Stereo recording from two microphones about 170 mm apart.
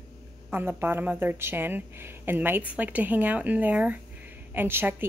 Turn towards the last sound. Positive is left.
turn(degrees=-15)  # may be behind; listen again after turning